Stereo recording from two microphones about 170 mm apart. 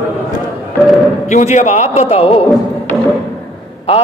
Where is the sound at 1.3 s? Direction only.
45° left (ahead or behind).